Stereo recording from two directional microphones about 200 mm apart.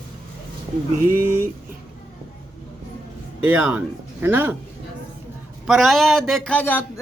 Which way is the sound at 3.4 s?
10° right (ahead or behind).